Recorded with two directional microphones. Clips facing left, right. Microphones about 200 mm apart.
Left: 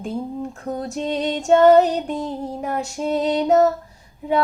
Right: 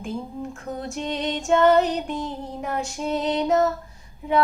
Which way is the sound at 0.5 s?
35° left (ahead or behind).